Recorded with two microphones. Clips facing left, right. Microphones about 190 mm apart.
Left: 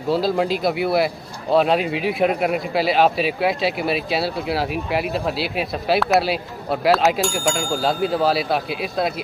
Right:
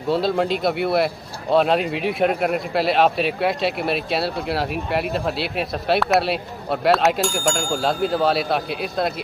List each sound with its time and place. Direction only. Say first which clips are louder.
0.1 s a man's voice: even; centre (ahead or behind)